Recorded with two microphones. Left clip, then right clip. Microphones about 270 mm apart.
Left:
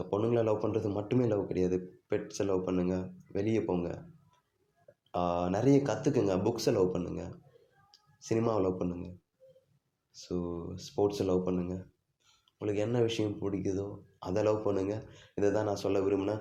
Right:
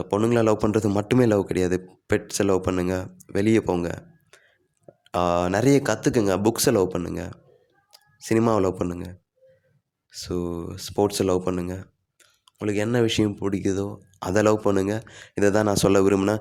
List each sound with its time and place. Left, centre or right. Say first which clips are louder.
0.0 s a man's voice: right 9 dB; right